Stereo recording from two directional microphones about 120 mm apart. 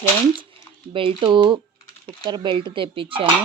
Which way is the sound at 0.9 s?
50° right (ahead or behind).